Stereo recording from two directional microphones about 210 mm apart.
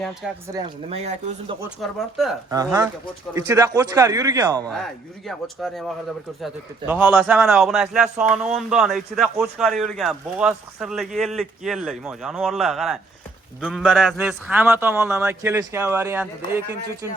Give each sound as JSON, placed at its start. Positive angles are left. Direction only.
{"t": 0.0, "sound": "a man's voice", "side_deg": 0}
{"t": 0.4, "sound": "a man's voice", "side_deg": -15}
{"t": 0.9, "sound": "speech", "side_deg": -30}
{"t": 1.8, "sound": "a man's voice", "side_deg": 0}
{"t": 2.5, "sound": "a man's voice", "side_deg": -15}
{"t": 4.7, "sound": "a man's voice", "side_deg": 0}